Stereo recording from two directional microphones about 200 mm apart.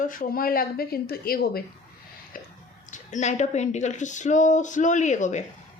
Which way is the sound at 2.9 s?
35° left (ahead or behind).